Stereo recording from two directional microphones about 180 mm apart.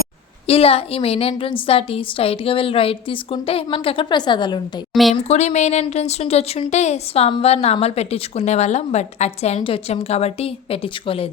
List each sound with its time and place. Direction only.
0.4 s a woman's voice: 35° left (ahead or behind)
5.3 s a woman's voice: 40° left (ahead or behind)